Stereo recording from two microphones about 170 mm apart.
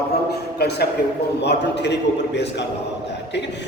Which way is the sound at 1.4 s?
85° left.